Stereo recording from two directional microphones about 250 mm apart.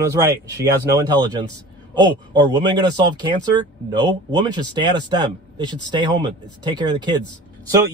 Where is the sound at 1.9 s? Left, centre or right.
Centre.